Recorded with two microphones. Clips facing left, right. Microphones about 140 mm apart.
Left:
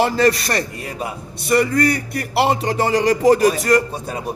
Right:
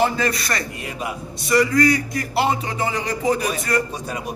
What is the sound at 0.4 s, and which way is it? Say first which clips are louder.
Speech: left 4 dB; 35° left (ahead or behind).